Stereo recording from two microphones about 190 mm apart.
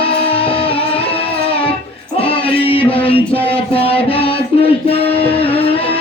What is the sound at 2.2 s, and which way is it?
Music, 30° left (ahead or behind).